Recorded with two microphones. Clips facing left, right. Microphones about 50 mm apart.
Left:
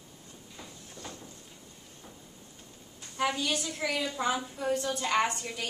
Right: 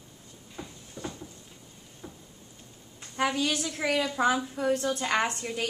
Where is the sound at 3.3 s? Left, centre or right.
Right.